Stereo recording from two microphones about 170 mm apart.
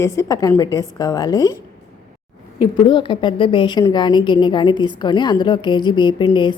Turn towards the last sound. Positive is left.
turn(degrees=30)  # may be behind; listen again after turning